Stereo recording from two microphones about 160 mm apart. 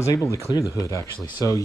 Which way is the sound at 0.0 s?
20° left (ahead or behind).